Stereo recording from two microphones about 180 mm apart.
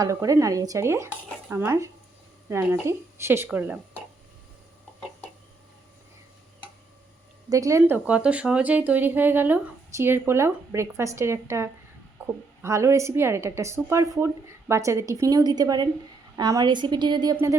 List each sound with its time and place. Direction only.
0.0 s a woman's voice: 20° right (ahead or behind)
7.5 s a woman's voice: 15° right (ahead or behind)